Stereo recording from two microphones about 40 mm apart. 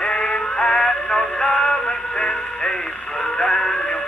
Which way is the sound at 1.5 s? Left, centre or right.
Left.